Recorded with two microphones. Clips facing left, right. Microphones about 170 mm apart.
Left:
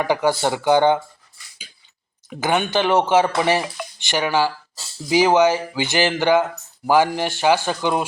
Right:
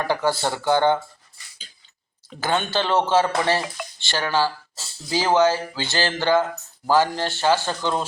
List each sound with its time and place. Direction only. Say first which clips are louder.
0.0 s speech: left 3 dB; 15° left (ahead or behind)
2.3 s speech: left 3 dB; 15° left (ahead or behind)